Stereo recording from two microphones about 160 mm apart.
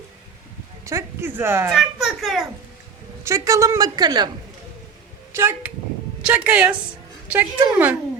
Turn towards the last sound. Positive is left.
turn(degrees=-10)  # may be behind; listen again after turning